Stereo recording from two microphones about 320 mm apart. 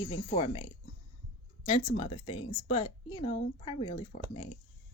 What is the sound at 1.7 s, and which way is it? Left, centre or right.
A woman's voice, centre.